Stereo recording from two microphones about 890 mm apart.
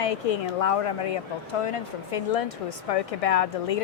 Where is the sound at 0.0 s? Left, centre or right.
Left.